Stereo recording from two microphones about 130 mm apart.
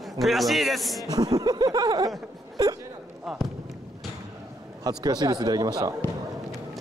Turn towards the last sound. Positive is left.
turn(degrees=-30)  # may be behind; listen again after turning